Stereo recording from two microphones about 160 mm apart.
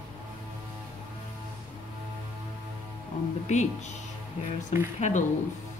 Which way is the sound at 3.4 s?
50° left (ahead or behind).